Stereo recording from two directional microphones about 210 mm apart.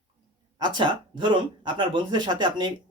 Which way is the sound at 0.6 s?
20° right (ahead or behind).